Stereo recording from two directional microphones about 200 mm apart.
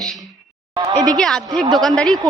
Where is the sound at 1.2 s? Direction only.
5° left (ahead or behind).